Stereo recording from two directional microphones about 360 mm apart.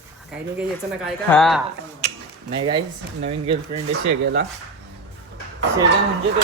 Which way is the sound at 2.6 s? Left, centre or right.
Centre.